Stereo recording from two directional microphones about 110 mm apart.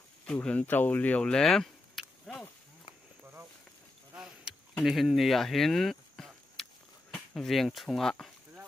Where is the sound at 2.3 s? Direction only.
5° right (ahead or behind).